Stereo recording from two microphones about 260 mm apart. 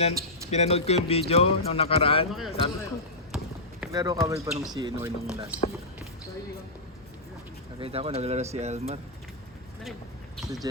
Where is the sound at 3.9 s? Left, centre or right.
Centre.